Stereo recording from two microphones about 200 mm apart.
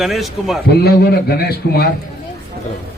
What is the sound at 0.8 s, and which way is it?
A man's voice, 50° left (ahead or behind).